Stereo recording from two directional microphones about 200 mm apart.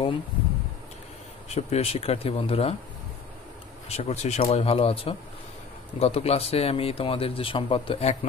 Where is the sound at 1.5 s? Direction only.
30° left (ahead or behind).